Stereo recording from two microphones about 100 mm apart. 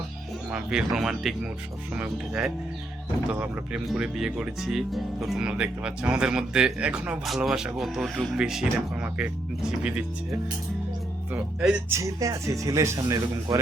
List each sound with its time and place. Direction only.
0.5 s speech: 10° right (ahead or behind)
11.9 s speech: 30° right (ahead or behind)